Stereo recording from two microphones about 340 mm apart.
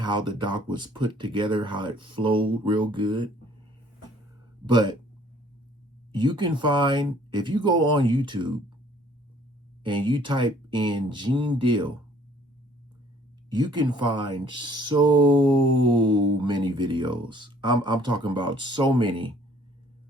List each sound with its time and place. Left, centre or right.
0.0 s speech: centre
4.6 s speech: centre
6.1 s speech: centre
9.8 s speech: centre
13.5 s speech: centre